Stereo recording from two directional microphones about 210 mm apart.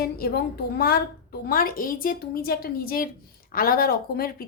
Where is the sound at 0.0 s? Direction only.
45° left (ahead or behind).